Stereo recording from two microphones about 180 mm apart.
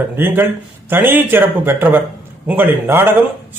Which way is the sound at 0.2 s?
10° right (ahead or behind).